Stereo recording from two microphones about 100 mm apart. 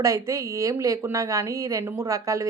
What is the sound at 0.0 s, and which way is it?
Speech, 30° right (ahead or behind).